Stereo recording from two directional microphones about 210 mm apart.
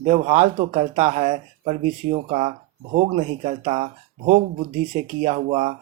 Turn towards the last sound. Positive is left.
turn(degrees=-30)  # may be behind; listen again after turning